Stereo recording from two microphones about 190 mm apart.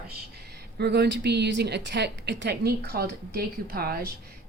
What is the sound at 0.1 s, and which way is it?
A woman's voice, 60° right (ahead or behind).